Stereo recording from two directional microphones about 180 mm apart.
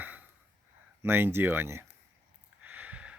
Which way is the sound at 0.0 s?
10° right (ahead or behind).